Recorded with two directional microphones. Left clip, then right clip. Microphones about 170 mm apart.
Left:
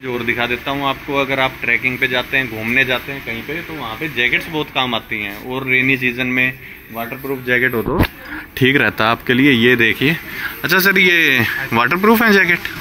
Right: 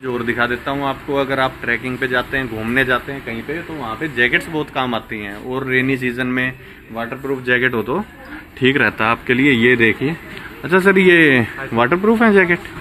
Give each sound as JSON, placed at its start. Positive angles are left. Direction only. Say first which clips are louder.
{"t": 0.1, "sound": "speech", "louder": "even", "side_deg": -5}
{"t": 4.0, "sound": "speech", "louder": "right 1 dB", "side_deg": -5}
{"t": 8.5, "sound": "speech", "louder": "left 1 dB", "side_deg": 40}
{"t": 9.4, "sound": "speech", "louder": "left 1 dB", "side_deg": 15}
{"t": 10.6, "sound": "speech", "louder": "even", "side_deg": -5}